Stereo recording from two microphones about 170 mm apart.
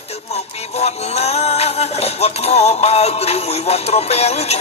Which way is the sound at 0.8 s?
40° left (ahead or behind).